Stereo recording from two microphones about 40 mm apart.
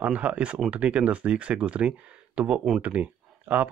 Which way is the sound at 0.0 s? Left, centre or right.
Right.